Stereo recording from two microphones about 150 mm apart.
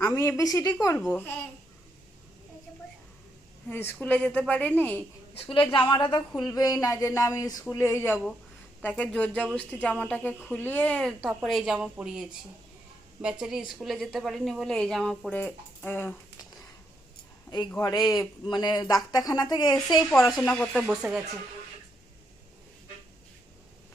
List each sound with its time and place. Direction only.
0.0 s speech: 20° left (ahead or behind)
3.7 s speech: 15° left (ahead or behind)
5.7 s a woman's voice: 30° left (ahead or behind); by 12.4 s 5° right (ahead or behind)
13.4 s a woman's voice: 5° right (ahead or behind); by 16.1 s 15° left (ahead or behind)
17.7 s speech: 20° left (ahead or behind)
20.1 s a woman's voice: centre (ahead or behind)
20.7 s a woman's voice: 5° right (ahead or behind)